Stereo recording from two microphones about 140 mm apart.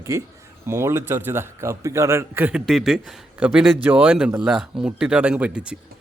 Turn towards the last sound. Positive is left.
turn(degrees=-10)  # may be behind; listen again after turning